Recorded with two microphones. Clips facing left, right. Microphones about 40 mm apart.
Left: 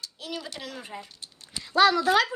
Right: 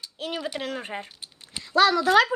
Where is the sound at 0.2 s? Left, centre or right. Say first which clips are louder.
Right 7 dB; right.